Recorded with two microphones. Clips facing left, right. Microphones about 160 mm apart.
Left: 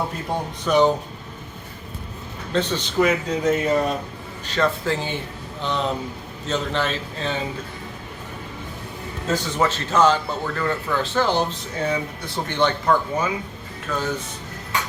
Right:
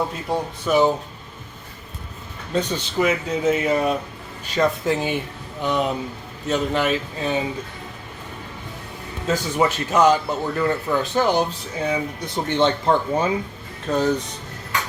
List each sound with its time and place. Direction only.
0.6 s a man's voice: 5° right (ahead or behind)
2.5 s a man's voice: 10° right (ahead or behind)
9.3 s a man's voice: 15° right (ahead or behind); by 14.3 s 35° right (ahead or behind)